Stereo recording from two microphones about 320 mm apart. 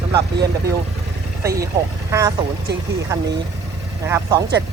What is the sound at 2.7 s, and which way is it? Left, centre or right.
Speech, right.